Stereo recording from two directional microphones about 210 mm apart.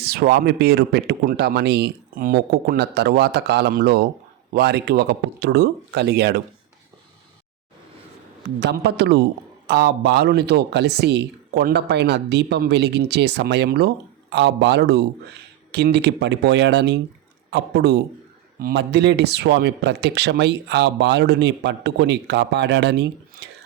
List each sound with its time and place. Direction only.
0.0 s a man's voice: 50° right (ahead or behind)
8.4 s a man's voice: 50° right (ahead or behind)